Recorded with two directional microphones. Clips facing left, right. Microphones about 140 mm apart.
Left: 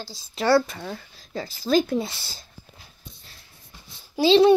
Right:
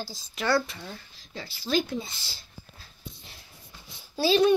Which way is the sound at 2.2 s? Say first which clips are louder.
Left 3 dB; 40° left (ahead or behind).